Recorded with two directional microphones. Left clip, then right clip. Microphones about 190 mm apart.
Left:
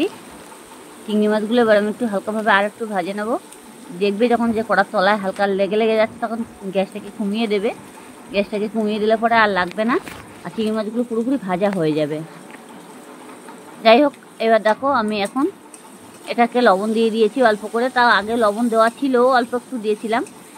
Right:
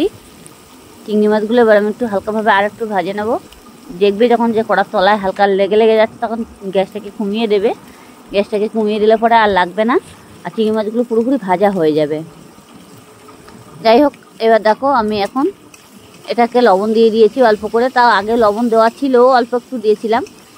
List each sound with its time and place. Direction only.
1.0 s speech: 45° right (ahead or behind)
13.8 s speech: 45° right (ahead or behind)